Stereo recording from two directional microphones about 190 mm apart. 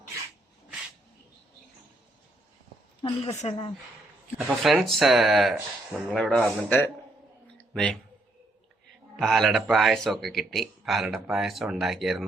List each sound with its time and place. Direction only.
3.0 s a woman's voice: 35° left (ahead or behind)
4.4 s a man's voice: centre (ahead or behind)
9.1 s a man's voice: centre (ahead or behind)